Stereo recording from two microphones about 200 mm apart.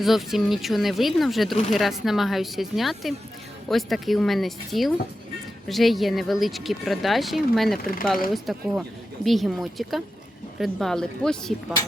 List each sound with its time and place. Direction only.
0.0 s speech: centre (ahead or behind)